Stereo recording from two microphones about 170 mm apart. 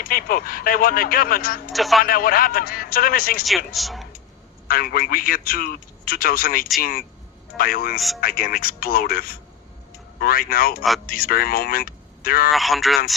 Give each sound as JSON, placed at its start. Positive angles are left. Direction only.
{"t": 0.0, "sound": "a man's voice", "side_deg": 60}
{"t": 1.7, "sound": "speech", "side_deg": 0}
{"t": 2.0, "sound": "a man's voice", "side_deg": 60}
{"t": 3.7, "sound": "speech", "side_deg": 0}
{"t": 4.7, "sound": "a man's voice", "side_deg": 60}
{"t": 7.9, "sound": "speech", "side_deg": 0}
{"t": 8.2, "sound": "a man's voice", "side_deg": 60}
{"t": 12.5, "sound": "speech", "side_deg": 0}